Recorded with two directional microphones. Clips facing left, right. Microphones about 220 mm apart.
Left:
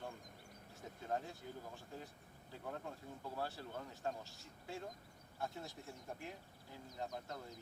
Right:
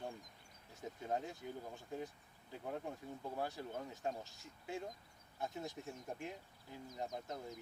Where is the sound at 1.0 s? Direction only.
15° right (ahead or behind).